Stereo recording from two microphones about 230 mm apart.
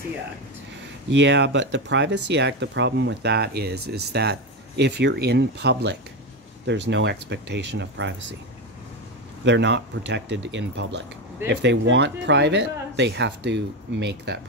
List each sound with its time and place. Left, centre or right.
1.2 s speech: right
9.4 s speech: right